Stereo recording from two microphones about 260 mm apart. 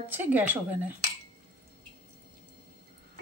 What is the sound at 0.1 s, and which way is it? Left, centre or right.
Speech, centre.